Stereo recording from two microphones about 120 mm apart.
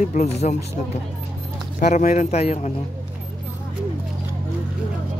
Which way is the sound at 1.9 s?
80° left.